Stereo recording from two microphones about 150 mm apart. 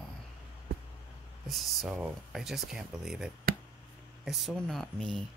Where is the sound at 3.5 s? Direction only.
80° right.